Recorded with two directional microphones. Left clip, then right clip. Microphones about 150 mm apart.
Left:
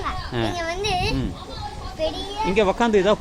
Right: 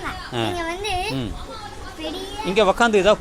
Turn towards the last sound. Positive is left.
turn(degrees=0)  # may be behind; listen again after turning